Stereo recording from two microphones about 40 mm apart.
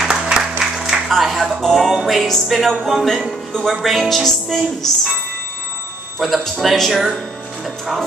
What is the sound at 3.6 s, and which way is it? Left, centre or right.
Speech, centre.